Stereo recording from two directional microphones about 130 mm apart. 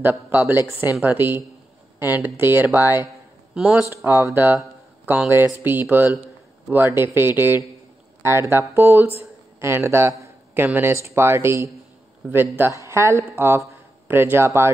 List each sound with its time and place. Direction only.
0.0 s speech: 15° right (ahead or behind)
4.3 s speech: 15° right (ahead or behind)